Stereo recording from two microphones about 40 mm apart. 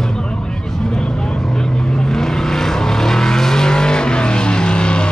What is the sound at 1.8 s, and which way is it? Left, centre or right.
Vehicle, centre.